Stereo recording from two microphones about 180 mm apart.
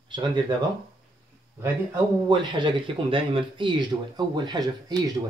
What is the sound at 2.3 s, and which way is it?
Speech, 25° right (ahead or behind).